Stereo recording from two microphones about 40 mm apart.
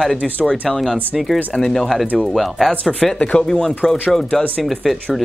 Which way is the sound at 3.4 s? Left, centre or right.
Centre.